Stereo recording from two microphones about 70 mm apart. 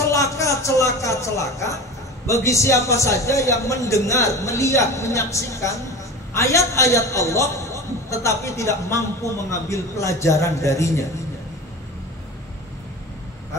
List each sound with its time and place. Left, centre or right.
0.0 s a man's voice: left